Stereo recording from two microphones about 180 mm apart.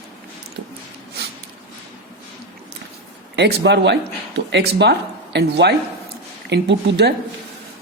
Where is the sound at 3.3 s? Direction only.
65° right (ahead or behind).